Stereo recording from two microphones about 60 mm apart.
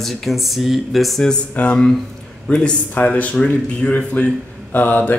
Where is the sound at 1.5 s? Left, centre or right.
Left.